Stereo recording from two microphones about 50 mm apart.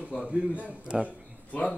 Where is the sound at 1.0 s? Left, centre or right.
Left.